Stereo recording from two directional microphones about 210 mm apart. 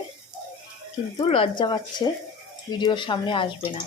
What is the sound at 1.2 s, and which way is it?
Speech, 25° left (ahead or behind).